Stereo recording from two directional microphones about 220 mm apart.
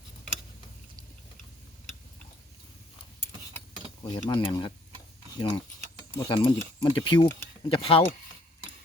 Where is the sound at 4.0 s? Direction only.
20° left (ahead or behind).